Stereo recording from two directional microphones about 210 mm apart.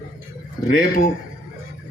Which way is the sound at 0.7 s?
40° left (ahead or behind).